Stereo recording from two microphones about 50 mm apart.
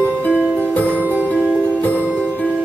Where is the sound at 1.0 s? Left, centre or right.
Right.